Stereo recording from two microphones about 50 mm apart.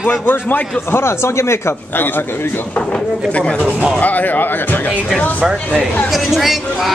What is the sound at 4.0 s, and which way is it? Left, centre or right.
Speech, left.